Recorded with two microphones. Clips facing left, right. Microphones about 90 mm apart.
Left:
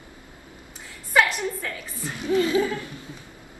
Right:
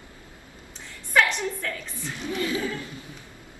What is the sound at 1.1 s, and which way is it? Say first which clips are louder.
Speech: left 1 dB; 5° left (ahead or behind).